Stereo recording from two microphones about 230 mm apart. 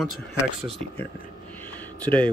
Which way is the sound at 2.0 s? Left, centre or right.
Centre.